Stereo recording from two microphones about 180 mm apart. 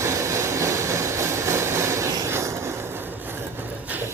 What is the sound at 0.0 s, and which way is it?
Vehicle, 15° right (ahead or behind).